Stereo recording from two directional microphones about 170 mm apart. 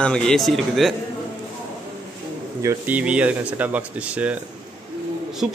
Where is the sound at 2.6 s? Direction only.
15° right (ahead or behind).